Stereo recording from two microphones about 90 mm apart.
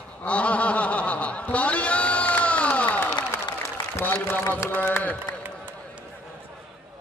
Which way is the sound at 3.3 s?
30° left (ahead or behind).